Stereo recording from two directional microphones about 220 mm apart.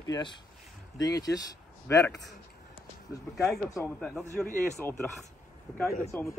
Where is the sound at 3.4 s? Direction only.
Centre (ahead or behind).